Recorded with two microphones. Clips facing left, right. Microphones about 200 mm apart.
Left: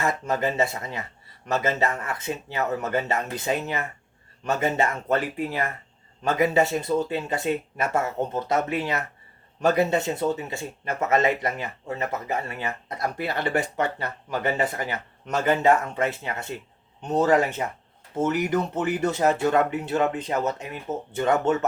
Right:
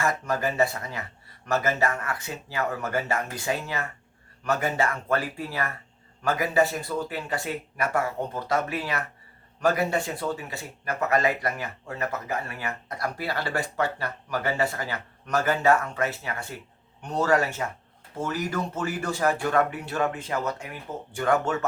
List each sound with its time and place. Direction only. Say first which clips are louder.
0.0 s speech: left 2 dB; 20° left (ahead or behind)